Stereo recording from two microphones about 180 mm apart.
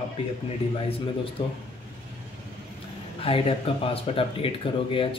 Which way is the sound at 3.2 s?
30° left (ahead or behind).